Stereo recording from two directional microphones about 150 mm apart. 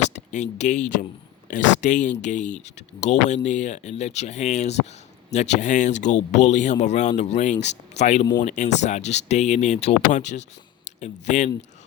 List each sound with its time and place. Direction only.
0.1 s speech: 50° left (ahead or behind)